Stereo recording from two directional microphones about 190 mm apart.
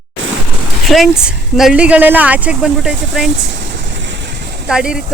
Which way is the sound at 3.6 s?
70° right (ahead or behind).